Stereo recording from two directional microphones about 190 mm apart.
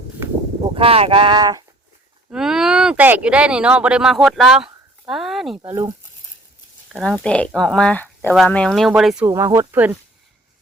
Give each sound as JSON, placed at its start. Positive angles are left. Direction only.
{"t": 0.7, "sound": "speech", "side_deg": -30}
{"t": 2.3, "sound": "speech", "side_deg": -5}
{"t": 6.8, "sound": "speech", "side_deg": 0}
{"t": 9.2, "sound": "speech", "side_deg": -15}